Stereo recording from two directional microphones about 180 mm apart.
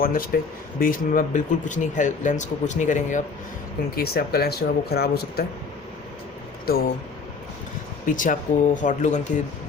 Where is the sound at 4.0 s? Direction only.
60° left (ahead or behind).